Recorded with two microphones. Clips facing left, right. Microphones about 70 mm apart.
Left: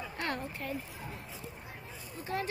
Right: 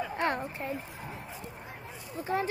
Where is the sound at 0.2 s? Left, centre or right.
Right.